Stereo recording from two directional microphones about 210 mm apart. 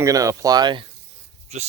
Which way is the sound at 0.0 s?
15° right (ahead or behind).